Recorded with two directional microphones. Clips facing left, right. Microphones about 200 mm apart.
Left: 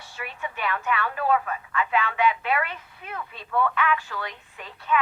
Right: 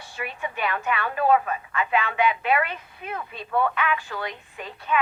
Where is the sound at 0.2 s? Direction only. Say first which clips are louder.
Right 3 dB; 15° right (ahead or behind).